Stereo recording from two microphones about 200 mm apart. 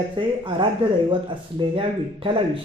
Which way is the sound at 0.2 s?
25° right (ahead or behind).